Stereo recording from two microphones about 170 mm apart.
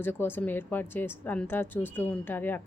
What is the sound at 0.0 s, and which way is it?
A woman's voice, 15° left (ahead or behind).